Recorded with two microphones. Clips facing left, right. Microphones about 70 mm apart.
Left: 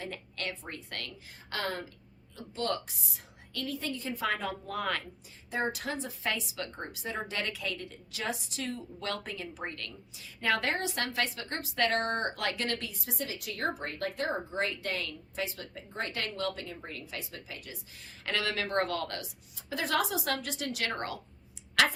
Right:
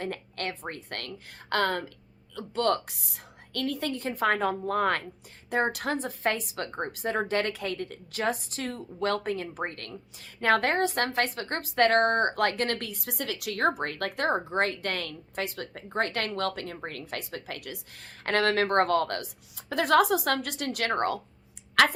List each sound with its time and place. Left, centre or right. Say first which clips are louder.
0.0 s a woman's voice: right 5 dB; right